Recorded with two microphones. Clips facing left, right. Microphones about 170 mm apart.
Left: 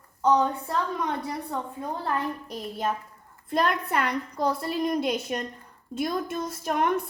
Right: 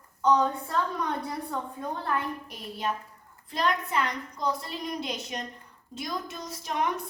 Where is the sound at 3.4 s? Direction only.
55° left (ahead or behind).